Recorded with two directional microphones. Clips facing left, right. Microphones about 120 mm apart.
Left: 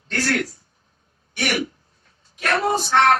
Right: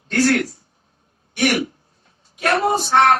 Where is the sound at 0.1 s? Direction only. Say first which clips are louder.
Right 6 dB; 15° right (ahead or behind).